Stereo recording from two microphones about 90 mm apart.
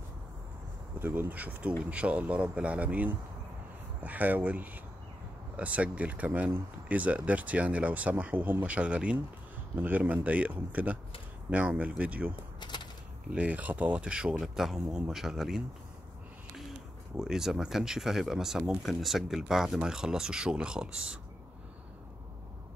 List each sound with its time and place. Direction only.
0.9 s speech: 25° right (ahead or behind)
12.5 s a sound: 55° left (ahead or behind)
13.3 s speech: 15° right (ahead or behind)
17.2 s speech: 5° right (ahead or behind)